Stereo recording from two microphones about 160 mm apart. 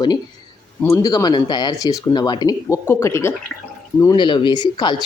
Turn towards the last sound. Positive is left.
turn(degrees=25)  # may be behind; listen again after turning